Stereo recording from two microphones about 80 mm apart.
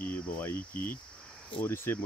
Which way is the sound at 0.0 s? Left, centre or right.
Left.